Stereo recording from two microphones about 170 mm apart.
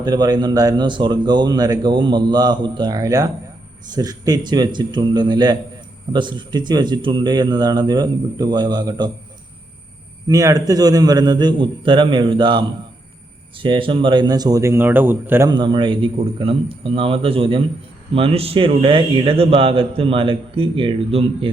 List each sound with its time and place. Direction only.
0.0 s a man's voice: 25° right (ahead or behind)
10.2 s a man's voice: 20° right (ahead or behind)
15.4 s speech: 30° right (ahead or behind)